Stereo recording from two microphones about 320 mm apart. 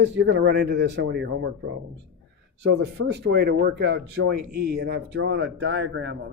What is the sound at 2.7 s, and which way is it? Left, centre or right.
Speech, right.